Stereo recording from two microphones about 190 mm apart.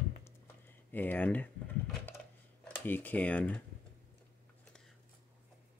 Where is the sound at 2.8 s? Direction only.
10° left (ahead or behind).